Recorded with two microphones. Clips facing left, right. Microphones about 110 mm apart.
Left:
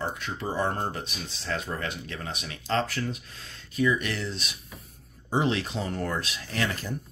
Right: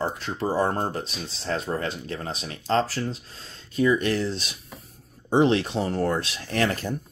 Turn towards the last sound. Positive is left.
turn(degrees=-40)  # may be behind; listen again after turning